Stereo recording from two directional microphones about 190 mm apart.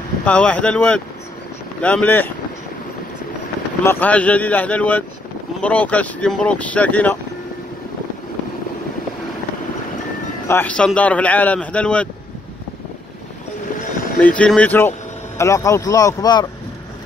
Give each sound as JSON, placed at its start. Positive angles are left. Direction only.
{"t": 0.2, "sound": "a man's voice", "side_deg": 10}
{"t": 3.8, "sound": "a man's voice", "side_deg": 10}
{"t": 10.5, "sound": "a man's voice", "side_deg": 5}
{"t": 14.2, "sound": "a man's voice", "side_deg": 5}